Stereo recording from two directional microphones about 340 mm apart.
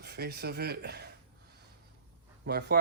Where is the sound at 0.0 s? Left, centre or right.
Right.